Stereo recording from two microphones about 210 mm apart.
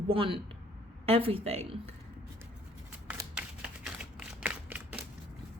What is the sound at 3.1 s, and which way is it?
Shuffling cards, 5° right (ahead or behind).